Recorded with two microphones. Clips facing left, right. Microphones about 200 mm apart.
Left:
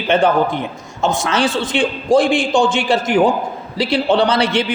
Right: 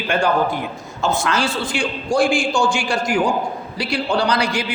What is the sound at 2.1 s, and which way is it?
Speech, 20° left (ahead or behind).